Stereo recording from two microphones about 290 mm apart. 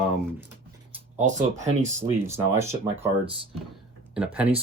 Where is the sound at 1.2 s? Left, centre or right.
Right.